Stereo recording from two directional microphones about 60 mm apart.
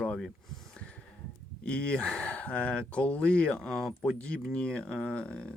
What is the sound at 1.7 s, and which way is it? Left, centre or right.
Speech, centre.